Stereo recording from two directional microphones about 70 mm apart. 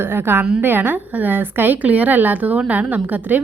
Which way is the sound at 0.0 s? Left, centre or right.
Right.